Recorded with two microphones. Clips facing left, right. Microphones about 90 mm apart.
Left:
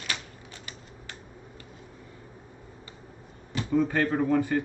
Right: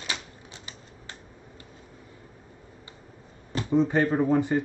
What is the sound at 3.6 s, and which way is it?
Speech, 25° right (ahead or behind).